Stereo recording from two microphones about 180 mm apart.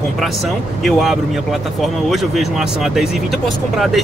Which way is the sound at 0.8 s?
Centre (ahead or behind).